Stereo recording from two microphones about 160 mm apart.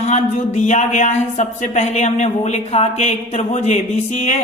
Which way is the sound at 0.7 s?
45° left (ahead or behind).